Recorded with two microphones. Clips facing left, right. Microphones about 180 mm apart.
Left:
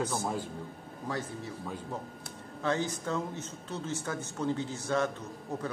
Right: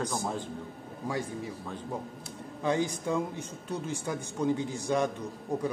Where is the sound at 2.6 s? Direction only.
15° right (ahead or behind).